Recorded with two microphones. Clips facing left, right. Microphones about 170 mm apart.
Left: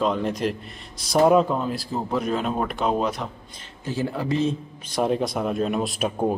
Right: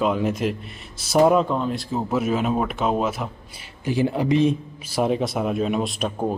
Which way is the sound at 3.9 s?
15° right (ahead or behind).